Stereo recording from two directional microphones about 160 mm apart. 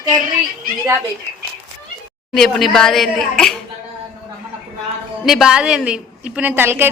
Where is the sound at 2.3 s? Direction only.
5° left (ahead or behind).